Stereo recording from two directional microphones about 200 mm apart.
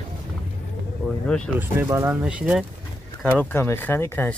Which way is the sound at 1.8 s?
10° right (ahead or behind).